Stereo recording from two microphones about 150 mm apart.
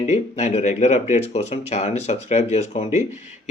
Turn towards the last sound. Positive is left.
turn(degrees=50)  # may be behind; listen again after turning